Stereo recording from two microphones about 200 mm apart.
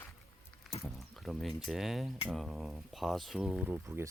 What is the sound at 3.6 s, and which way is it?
Speech, 10° right (ahead or behind).